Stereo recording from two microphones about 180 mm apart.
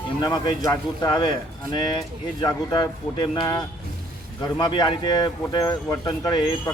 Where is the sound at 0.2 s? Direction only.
20° left (ahead or behind).